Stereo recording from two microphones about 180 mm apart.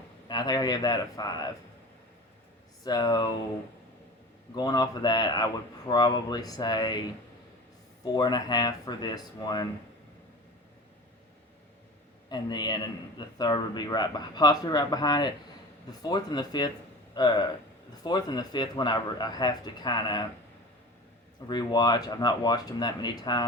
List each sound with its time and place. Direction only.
0.3 s a man's voice: 25° left (ahead or behind)
2.8 s a man's voice: 20° left (ahead or behind)
4.5 s a man's voice: 20° left (ahead or behind)
8.0 s a man's voice: 25° left (ahead or behind)
12.3 s a man's voice: 25° left (ahead or behind)
21.4 s a man's voice: 25° left (ahead or behind)